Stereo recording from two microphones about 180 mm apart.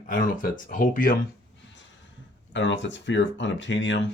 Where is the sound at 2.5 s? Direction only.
85° left.